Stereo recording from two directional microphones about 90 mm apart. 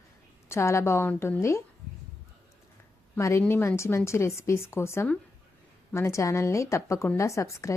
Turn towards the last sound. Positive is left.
turn(degrees=35)  # may be behind; listen again after turning